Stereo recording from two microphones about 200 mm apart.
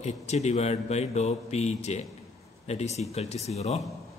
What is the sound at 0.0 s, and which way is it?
Speech, 35° left (ahead or behind).